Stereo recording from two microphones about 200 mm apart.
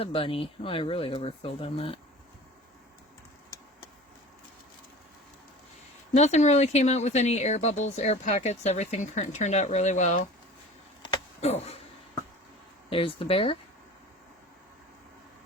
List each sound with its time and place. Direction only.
0.0 s speech: 25° left (ahead or behind)
6.1 s speech: 35° left (ahead or behind)
11.3 s speech: 35° left (ahead or behind)
12.9 s speech: 25° left (ahead or behind)